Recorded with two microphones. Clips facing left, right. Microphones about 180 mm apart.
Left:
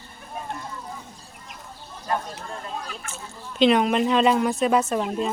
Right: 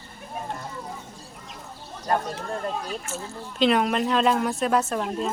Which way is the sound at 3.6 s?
Centre (ahead or behind).